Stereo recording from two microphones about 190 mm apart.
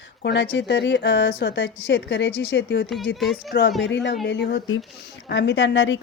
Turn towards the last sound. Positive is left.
turn(degrees=75)  # may be behind; listen again after turning